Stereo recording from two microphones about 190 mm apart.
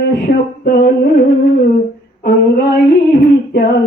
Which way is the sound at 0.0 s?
55° left (ahead or behind).